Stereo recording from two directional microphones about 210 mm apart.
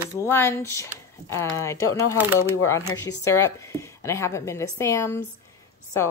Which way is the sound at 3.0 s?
15° left (ahead or behind).